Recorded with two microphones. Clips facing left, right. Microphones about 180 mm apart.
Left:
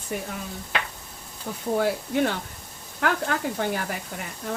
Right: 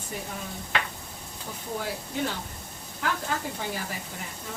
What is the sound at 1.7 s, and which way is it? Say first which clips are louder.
Speech: left 9 dB; 65° left (ahead or behind).